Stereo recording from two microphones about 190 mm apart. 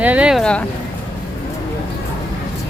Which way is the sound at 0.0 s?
5° right (ahead or behind).